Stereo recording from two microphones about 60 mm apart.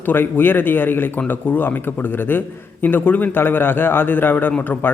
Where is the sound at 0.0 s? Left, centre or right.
Left.